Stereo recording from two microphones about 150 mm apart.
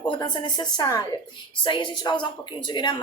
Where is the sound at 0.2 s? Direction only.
30° left (ahead or behind).